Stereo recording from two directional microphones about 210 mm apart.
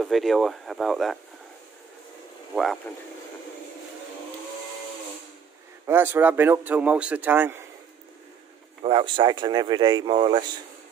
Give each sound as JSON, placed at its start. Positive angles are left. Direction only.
{"t": 0.0, "sound": "speech", "side_deg": 0}
{"t": 2.5, "sound": "speech", "side_deg": 0}
{"t": 5.9, "sound": "a man's voice", "side_deg": -10}
{"t": 8.8, "sound": "speech", "side_deg": -25}